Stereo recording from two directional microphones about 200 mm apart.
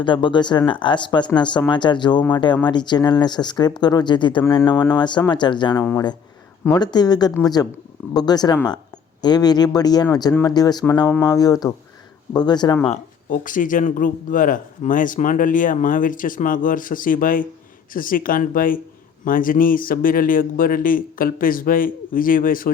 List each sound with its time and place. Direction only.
0.0 s speech: 25° left (ahead or behind)
12.9 s speech: 40° left (ahead or behind)